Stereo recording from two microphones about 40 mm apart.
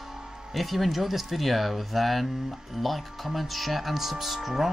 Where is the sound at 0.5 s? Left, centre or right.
Centre.